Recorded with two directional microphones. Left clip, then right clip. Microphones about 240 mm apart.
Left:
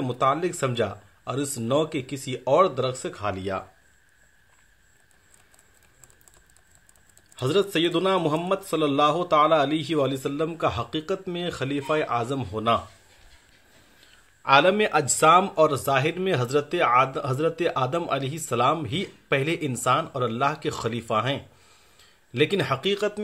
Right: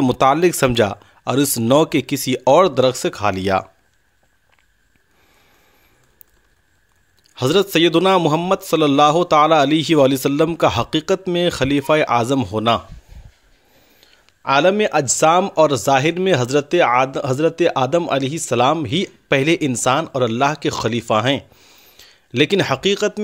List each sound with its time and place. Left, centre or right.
0.0 s speech: right
7.3 s speech: right
14.4 s speech: right